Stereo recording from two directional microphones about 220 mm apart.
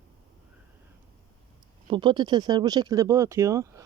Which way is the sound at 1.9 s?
20° right (ahead or behind).